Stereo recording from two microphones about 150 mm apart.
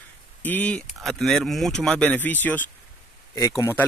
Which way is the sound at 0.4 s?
10° left (ahead or behind).